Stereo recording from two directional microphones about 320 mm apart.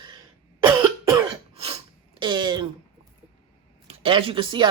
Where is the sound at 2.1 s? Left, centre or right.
Centre.